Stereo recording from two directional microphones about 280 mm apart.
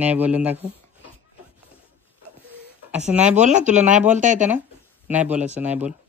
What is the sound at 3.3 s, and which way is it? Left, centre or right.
Speech, right.